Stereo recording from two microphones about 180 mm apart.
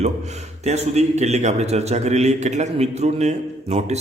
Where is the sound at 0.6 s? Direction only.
40° right (ahead or behind).